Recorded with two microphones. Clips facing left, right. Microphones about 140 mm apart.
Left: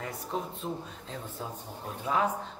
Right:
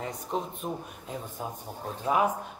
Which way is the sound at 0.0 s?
20° right (ahead or behind).